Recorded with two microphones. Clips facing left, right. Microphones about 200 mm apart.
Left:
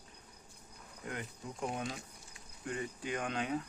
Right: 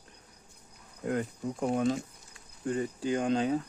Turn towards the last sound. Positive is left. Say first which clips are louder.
# right 9 dB
turn(degrees=-30)  # may be behind; listen again after turning